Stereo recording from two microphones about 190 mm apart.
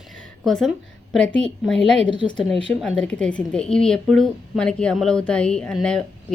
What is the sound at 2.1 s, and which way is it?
Speech, 25° left (ahead or behind).